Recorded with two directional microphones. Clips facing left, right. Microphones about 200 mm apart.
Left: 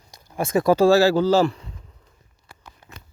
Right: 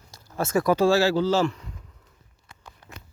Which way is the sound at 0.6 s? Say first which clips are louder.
Left 5 dB; 35° left (ahead or behind).